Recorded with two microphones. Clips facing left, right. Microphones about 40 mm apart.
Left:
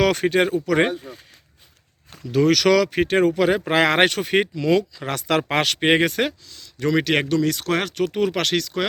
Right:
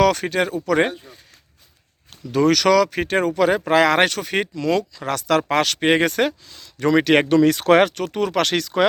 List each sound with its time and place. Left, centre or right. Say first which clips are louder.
0.0 s speech: even; centre
2.3 s speech: right 1 dB; centre
5.0 s speech: right 2 dB; left
6.1 s speech: right 3 dB; centre
6.5 s speech: right 3 dB; centre
7.3 s speech: right 6 dB; right
7.9 s speech: even; centre
8.5 s speech: right 5 dB; centre